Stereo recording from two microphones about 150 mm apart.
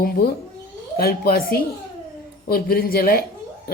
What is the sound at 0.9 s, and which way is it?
Speech, 90° left.